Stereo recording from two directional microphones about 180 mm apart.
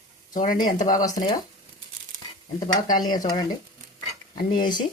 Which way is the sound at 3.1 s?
20° left (ahead or behind).